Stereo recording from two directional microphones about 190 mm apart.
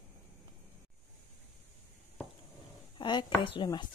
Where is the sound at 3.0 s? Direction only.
25° left (ahead or behind).